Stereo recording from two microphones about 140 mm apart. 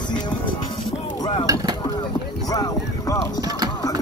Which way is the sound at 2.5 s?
25° left (ahead or behind).